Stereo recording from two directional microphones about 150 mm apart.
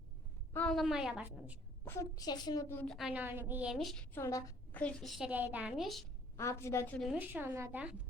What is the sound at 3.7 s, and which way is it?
Speech, centre (ahead or behind).